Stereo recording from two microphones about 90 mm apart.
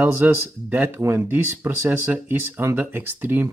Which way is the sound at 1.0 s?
30° right (ahead or behind).